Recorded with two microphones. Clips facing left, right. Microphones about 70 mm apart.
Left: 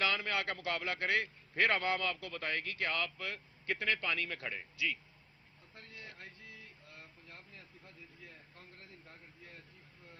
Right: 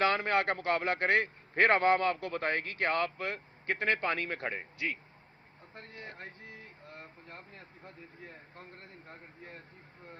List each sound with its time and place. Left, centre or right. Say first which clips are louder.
0.0 s a man's voice: right 7 dB; right